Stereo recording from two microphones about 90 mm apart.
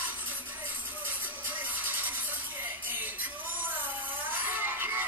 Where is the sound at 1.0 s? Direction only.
20° right (ahead or behind).